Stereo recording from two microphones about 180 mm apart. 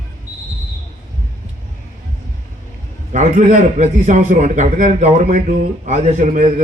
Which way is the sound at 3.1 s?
40° right (ahead or behind).